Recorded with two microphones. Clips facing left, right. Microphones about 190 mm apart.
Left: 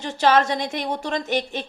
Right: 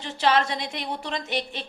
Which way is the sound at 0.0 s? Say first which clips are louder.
Left 4 dB; 45° left (ahead or behind).